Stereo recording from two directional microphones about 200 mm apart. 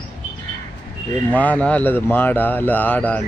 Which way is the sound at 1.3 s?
5° left (ahead or behind).